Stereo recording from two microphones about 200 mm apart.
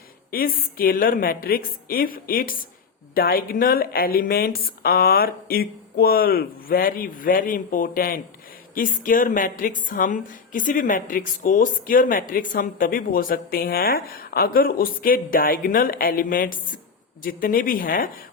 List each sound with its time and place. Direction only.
0.3 s speech: 45° left (ahead or behind)